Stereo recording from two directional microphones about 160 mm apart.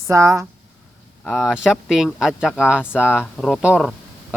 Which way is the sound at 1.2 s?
5° right (ahead or behind).